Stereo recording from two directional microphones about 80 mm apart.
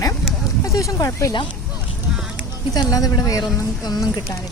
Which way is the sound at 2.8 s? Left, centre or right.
Left.